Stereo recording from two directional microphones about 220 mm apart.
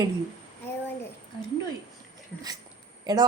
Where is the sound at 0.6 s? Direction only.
10° left (ahead or behind).